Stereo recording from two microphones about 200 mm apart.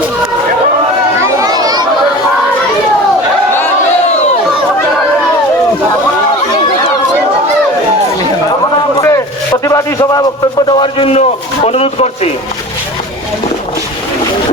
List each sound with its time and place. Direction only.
1.4 s chatter: 20° right (ahead or behind)
9.0 s a sound: 15° left (ahead or behind)
10.7 s a man's voice: 25° left (ahead or behind)